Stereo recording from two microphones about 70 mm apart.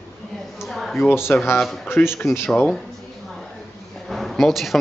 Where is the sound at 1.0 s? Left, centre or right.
Left.